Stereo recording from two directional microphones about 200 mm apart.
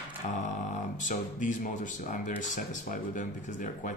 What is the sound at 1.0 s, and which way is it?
Speech, 40° left (ahead or behind).